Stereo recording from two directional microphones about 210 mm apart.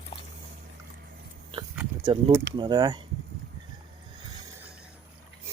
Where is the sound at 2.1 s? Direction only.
25° right (ahead or behind).